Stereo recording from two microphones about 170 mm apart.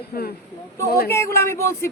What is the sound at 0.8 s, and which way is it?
Speech, 65° left (ahead or behind).